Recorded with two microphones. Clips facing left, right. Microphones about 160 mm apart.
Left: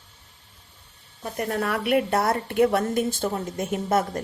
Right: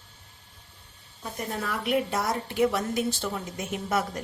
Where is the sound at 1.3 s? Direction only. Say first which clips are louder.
Left 6 dB; 65° left (ahead or behind).